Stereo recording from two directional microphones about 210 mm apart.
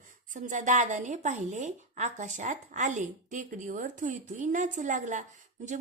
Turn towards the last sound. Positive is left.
turn(degrees=-35)  # may be behind; listen again after turning